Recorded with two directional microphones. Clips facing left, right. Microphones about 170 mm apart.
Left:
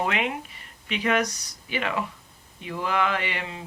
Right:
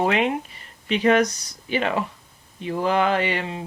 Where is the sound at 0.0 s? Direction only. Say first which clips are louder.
Right 6 dB; 35° right (ahead or behind).